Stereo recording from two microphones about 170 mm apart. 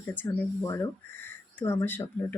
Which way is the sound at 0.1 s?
15° left (ahead or behind).